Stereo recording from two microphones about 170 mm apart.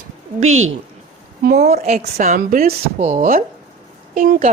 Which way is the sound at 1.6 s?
40° right (ahead or behind).